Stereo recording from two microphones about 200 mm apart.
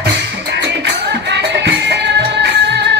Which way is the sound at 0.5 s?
60° right (ahead or behind).